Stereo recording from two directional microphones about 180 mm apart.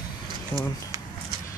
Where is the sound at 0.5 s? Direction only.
10° left (ahead or behind).